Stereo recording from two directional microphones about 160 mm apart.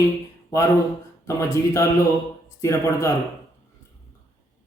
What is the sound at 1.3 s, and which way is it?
Speech, 20° left (ahead or behind).